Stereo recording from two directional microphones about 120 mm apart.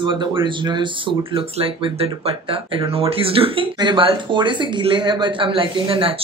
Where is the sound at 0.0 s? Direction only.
40° right (ahead or behind).